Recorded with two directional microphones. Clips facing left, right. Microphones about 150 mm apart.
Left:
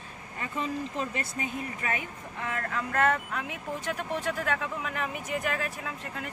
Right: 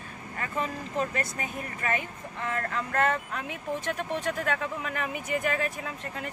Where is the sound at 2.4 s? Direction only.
5° left (ahead or behind).